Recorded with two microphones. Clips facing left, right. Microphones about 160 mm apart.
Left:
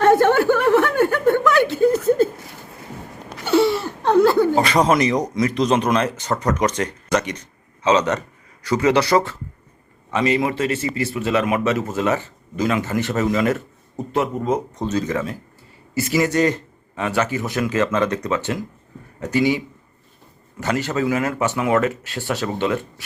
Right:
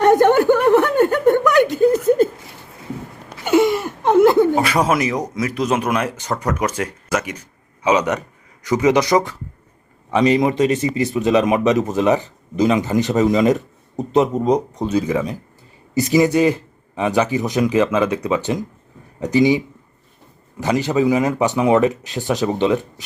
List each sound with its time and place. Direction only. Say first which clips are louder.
0.0 s chuckle: right 2 dB; 15° right (ahead or behind)
3.4 s a sound: right 2 dB; 15° right (ahead or behind)
4.6 s a man's voice: left 1 dB; 5° right (ahead or behind)